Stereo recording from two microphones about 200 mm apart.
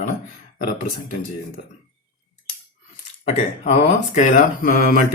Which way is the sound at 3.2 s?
30° left (ahead or behind).